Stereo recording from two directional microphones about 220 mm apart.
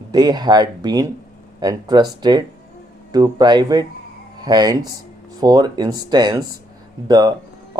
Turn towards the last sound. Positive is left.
turn(degrees=-20)  # may be behind; listen again after turning